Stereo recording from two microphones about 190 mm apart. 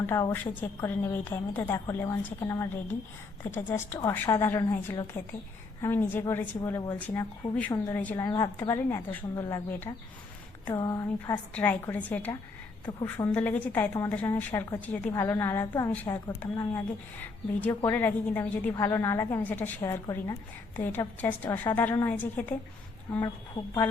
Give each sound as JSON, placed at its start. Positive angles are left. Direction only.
{"t": 0.1, "sound": "a woman's voice", "side_deg": 15}
{"t": 12.8, "sound": "a woman's voice", "side_deg": 20}
{"t": 13.2, "sound": "a woman's voice", "side_deg": 10}